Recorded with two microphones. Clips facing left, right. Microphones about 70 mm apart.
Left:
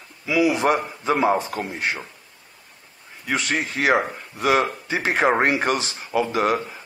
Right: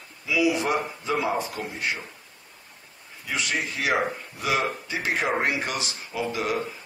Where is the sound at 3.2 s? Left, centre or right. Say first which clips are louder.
Left 4 dB; left.